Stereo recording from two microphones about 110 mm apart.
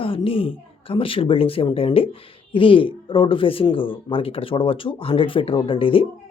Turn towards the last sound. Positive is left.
turn(degrees=55)  # may be behind; listen again after turning